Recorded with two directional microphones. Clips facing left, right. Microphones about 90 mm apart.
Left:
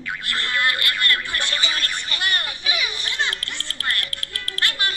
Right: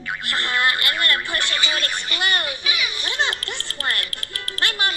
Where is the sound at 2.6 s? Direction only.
35° left (ahead or behind).